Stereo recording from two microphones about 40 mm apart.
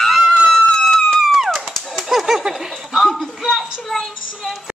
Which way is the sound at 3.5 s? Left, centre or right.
Centre.